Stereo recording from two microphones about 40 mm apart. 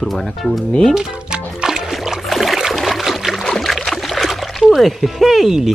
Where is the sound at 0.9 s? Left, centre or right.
Centre.